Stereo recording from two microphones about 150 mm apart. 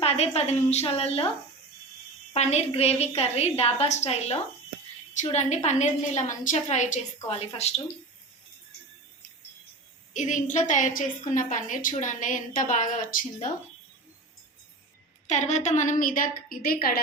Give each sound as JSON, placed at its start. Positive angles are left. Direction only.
{"t": 0.0, "sound": "a woman's voice", "side_deg": 45}
{"t": 2.3, "sound": "a woman's voice", "side_deg": 45}
{"t": 10.2, "sound": "a woman's voice", "side_deg": 55}
{"t": 15.3, "sound": "a woman's voice", "side_deg": 50}